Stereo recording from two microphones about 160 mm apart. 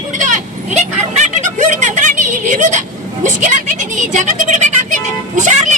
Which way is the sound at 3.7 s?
50° right (ahead or behind).